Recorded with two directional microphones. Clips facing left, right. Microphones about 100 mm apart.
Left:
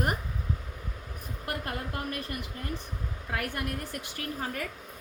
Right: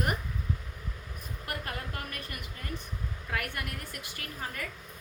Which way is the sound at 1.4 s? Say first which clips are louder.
Left 3 dB; 30° left (ahead or behind).